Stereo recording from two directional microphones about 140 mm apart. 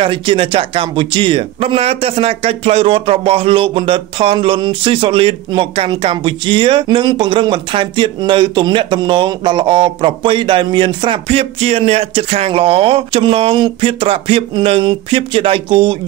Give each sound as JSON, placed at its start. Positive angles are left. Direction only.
{"t": 0.0, "sound": "speech", "side_deg": -40}